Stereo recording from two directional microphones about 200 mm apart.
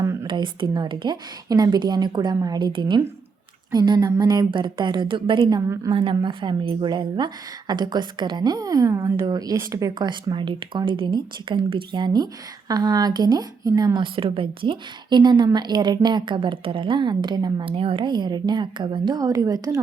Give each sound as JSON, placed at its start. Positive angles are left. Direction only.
{"t": 0.0, "sound": "a woman's voice", "side_deg": -15}
{"t": 5.9, "sound": "a woman's voice", "side_deg": -25}